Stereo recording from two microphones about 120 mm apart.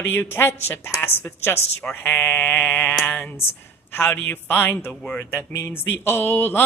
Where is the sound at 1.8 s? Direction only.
15° left (ahead or behind).